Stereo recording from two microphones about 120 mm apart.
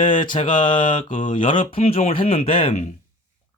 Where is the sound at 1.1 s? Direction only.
90° left.